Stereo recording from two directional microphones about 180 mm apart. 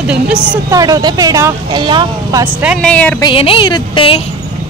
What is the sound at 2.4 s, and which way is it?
Speech, 10° right (ahead or behind).